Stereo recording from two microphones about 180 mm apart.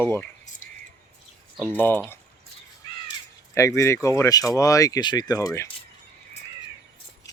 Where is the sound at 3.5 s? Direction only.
15° left (ahead or behind).